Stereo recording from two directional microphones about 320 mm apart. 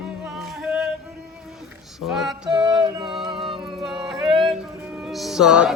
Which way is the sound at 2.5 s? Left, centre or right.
Centre.